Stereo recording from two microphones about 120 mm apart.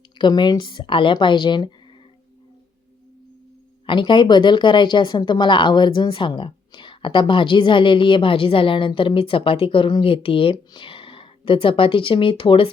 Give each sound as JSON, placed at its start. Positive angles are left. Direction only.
{"t": 0.2, "sound": "a woman's voice", "side_deg": 40}
{"t": 3.8, "sound": "speech", "side_deg": 40}